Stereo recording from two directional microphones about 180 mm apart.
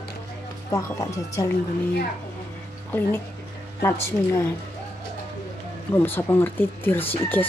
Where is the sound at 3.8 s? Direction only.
15° left (ahead or behind).